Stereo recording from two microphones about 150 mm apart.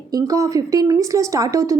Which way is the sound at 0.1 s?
20° right (ahead or behind).